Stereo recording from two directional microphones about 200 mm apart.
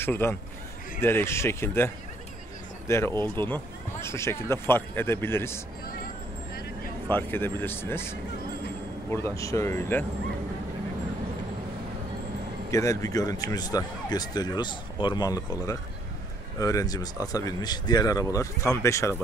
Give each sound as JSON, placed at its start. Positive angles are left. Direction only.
{"t": 0.0, "sound": "speech", "side_deg": 10}
{"t": 2.9, "sound": "speech", "side_deg": 10}
{"t": 7.1, "sound": "speech", "side_deg": 10}
{"t": 12.7, "sound": "speech", "side_deg": 15}